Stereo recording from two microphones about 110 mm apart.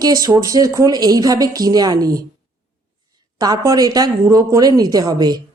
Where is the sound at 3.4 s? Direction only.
35° right (ahead or behind).